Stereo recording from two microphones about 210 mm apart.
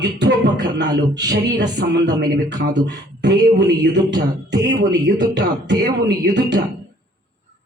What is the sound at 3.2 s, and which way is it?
Speech, 55° right (ahead or behind).